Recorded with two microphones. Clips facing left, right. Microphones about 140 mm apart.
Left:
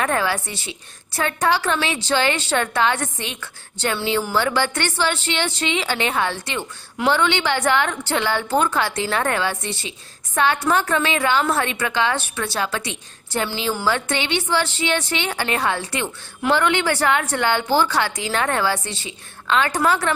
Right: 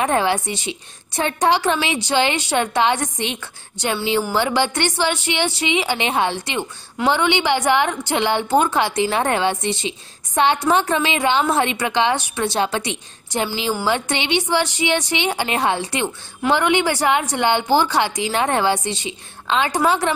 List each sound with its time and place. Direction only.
0.0 s a woman's voice: 20° right (ahead or behind)